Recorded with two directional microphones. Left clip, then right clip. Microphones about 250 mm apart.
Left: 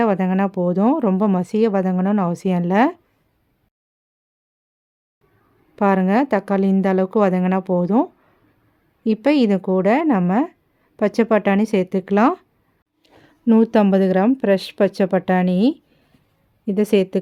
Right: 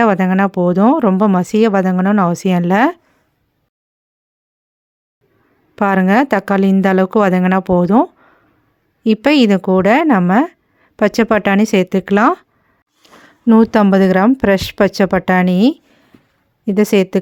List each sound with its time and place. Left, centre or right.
0.0 s a woman's voice: right
5.7 s a woman's voice: right